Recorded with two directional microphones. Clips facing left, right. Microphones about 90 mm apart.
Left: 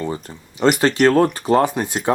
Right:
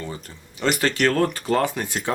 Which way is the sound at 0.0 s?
30° left (ahead or behind).